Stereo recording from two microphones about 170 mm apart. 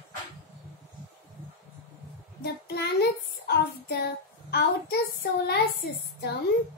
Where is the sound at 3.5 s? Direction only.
70° left (ahead or behind).